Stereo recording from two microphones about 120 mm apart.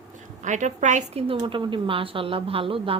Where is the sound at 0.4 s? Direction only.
90° right.